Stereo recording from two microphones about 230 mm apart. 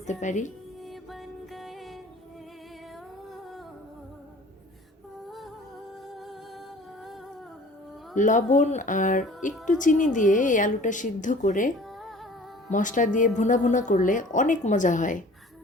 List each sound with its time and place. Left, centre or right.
0.1 s a woman's voice: left
0.9 s music: centre
8.1 s a woman's voice: left
12.7 s a woman's voice: left